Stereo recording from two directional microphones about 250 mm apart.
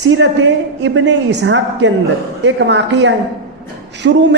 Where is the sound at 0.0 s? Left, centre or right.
Right.